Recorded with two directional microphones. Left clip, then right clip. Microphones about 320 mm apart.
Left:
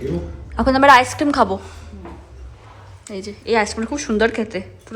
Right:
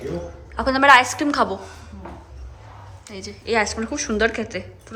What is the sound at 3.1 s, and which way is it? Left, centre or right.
Speech, centre.